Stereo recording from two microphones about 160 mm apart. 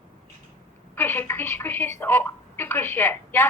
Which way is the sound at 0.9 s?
15° left (ahead or behind).